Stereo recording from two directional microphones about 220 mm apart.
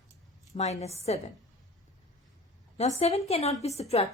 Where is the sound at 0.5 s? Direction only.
30° left (ahead or behind).